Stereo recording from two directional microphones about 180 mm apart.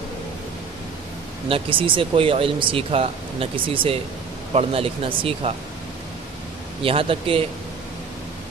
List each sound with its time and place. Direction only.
1.5 s speech: 30° right (ahead or behind)
6.8 s speech: 30° right (ahead or behind)